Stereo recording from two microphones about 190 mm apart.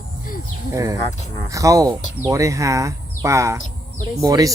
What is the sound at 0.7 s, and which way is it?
Speech, 15° right (ahead or behind).